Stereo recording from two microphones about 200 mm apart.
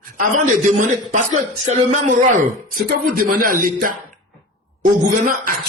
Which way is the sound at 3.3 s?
45° right (ahead or behind).